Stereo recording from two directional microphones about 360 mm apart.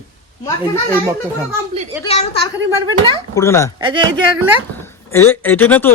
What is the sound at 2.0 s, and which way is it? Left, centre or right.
A man's voice, centre.